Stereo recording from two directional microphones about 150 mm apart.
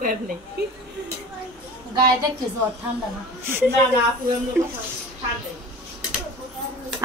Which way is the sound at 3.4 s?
15° right (ahead or behind).